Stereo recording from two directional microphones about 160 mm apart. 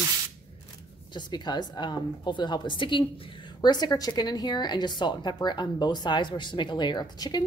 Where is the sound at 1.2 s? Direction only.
25° left (ahead or behind).